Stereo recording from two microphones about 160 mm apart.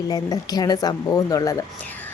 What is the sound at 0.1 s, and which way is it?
A woman's voice, 25° left (ahead or behind).